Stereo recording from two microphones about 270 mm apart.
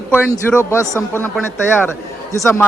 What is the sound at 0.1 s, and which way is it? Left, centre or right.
Speech, centre.